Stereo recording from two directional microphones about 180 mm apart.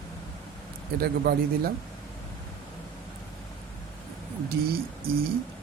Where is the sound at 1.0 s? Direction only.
60° right (ahead or behind).